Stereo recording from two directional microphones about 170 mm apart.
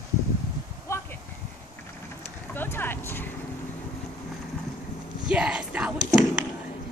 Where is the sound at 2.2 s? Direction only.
15° left (ahead or behind).